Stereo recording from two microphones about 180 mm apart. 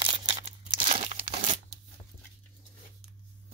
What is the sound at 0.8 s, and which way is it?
Crumpling, 35° right (ahead or behind).